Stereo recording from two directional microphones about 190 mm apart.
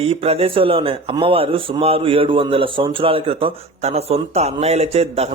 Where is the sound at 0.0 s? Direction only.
30° right (ahead or behind).